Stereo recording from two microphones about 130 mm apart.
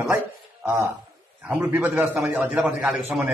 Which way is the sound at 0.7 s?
20° right (ahead or behind).